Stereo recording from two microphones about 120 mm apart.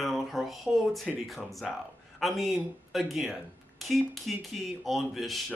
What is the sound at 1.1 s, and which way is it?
Speech, centre (ahead or behind).